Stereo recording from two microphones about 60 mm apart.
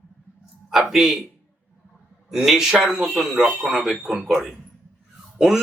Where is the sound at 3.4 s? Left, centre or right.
Right.